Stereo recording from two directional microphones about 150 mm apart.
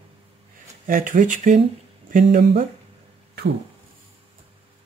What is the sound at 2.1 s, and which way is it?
Speech, 80° right.